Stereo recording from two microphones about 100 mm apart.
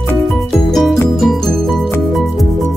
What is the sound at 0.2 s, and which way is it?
Music, centre (ahead or behind).